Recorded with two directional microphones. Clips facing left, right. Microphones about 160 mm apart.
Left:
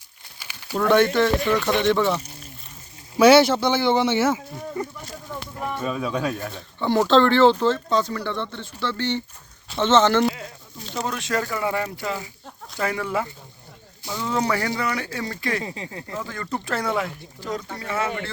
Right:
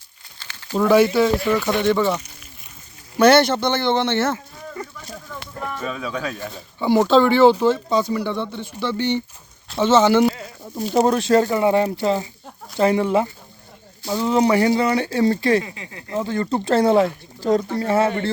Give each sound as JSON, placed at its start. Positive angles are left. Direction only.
{"t": 0.3, "sound": "a sound", "side_deg": 10}
{"t": 0.8, "sound": "a man's voice", "side_deg": -10}
{"t": 4.7, "sound": "a man's voice", "side_deg": 20}
{"t": 5.8, "sound": "speech", "side_deg": 5}
{"t": 10.9, "sound": "speech", "side_deg": -40}
{"t": 15.6, "sound": "speech", "side_deg": 30}
{"t": 16.1, "sound": "speech", "side_deg": -25}